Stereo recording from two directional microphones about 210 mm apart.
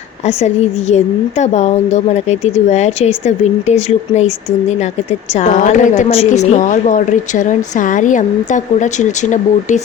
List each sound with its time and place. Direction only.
0.3 s a woman's voice: 30° left (ahead or behind)
5.3 s a woman's voice: 35° left (ahead or behind)